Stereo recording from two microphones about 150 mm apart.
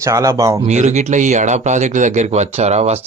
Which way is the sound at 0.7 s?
50° right (ahead or behind).